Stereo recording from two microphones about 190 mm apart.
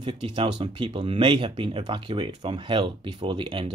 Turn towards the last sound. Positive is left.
turn(degrees=-25)  # may be behind; listen again after turning